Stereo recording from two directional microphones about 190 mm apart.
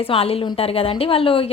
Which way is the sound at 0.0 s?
30° left (ahead or behind).